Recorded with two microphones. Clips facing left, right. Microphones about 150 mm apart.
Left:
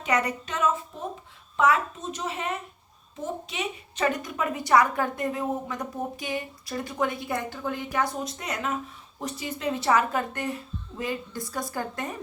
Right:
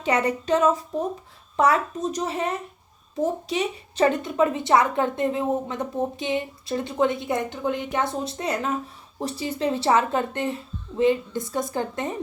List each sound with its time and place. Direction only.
0.0 s a woman's voice: 30° right (ahead or behind)